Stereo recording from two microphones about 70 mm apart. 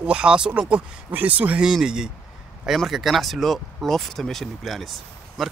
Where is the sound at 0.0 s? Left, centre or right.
Centre.